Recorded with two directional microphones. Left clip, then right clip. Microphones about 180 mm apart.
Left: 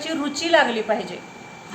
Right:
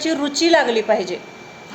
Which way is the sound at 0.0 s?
30° right (ahead or behind).